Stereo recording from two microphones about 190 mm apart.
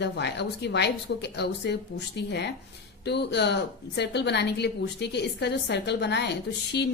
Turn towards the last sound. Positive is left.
turn(degrees=60)  # may be behind; listen again after turning